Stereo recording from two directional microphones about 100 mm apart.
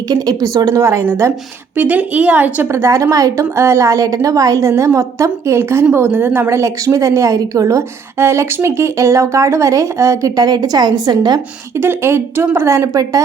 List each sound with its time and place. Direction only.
0.1 s a woman's voice: 35° right (ahead or behind)
1.7 s a woman's voice: 15° right (ahead or behind)
2.7 s a woman's voice: 30° right (ahead or behind)
11.8 s a woman's voice: 25° right (ahead or behind)